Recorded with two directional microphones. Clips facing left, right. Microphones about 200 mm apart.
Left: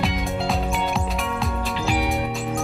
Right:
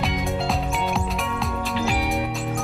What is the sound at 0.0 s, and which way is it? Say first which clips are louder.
Music: even; centre (ahead or behind).